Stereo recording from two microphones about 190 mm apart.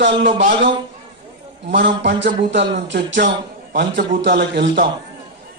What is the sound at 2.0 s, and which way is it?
A man's voice, 65° right (ahead or behind).